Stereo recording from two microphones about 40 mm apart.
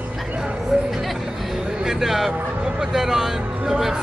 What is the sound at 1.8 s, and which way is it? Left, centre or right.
Speech, centre.